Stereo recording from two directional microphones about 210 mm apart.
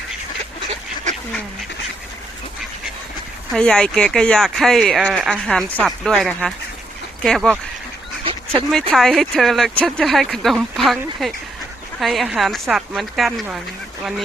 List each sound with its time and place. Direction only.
3.5 s speech: 5° left (ahead or behind)
8.2 s duck: 25° right (ahead or behind)
8.9 s speech: centre (ahead or behind)